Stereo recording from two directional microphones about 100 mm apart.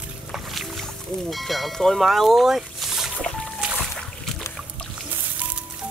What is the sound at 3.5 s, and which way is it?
Music, 10° right (ahead or behind).